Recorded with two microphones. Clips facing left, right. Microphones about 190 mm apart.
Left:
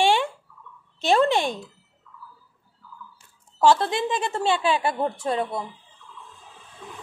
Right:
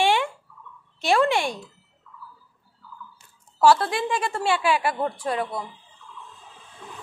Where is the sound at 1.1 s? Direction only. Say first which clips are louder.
Left 1 dB; 20° left (ahead or behind).